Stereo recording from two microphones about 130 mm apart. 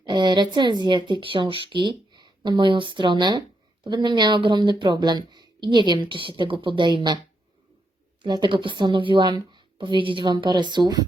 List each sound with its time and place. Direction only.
0.0 s speech: 35° right (ahead or behind)
8.2 s speech: 35° right (ahead or behind)